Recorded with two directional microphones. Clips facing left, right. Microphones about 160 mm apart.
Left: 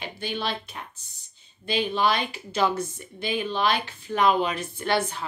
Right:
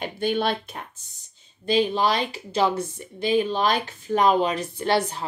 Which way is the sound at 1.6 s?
40° right (ahead or behind).